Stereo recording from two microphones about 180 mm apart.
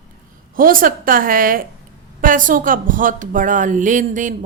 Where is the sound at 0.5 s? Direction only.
50° right (ahead or behind).